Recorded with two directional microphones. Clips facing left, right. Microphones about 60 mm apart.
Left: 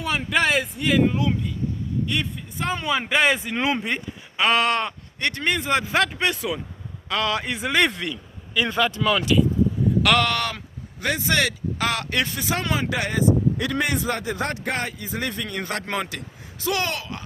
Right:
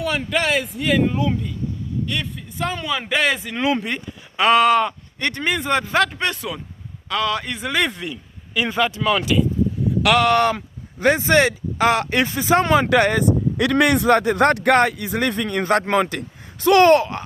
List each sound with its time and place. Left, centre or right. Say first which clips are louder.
0.0 s speech: right 1 dB; centre
2.0 s speech: even; centre
2.6 s a man's voice: left 1 dB; left
3.1 s speech: even; centre
4.4 s speech: right 6 dB; centre
10.2 s speech: right 9 dB; right
16.9 s speech: right 16 dB; right